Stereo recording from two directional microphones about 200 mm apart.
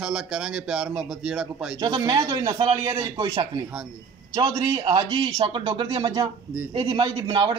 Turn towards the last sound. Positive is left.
turn(degrees=-25)  # may be behind; listen again after turning